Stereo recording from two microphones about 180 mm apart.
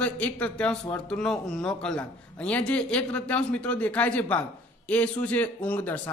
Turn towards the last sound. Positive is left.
turn(degrees=10)  # may be behind; listen again after turning